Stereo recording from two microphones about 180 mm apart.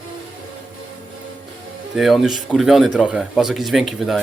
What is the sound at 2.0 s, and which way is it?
A man's voice, centre (ahead or behind).